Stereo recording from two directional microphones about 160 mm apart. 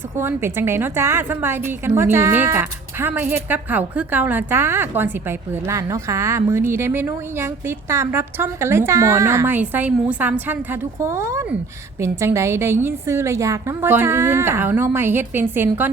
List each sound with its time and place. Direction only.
0.2 s a woman's voice: 15° right (ahead or behind)